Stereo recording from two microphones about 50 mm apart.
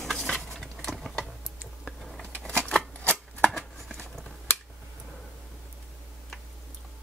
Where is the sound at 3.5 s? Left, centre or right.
Centre.